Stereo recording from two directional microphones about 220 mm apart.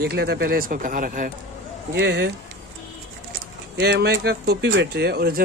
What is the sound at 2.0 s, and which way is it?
Speech, 50° right (ahead or behind).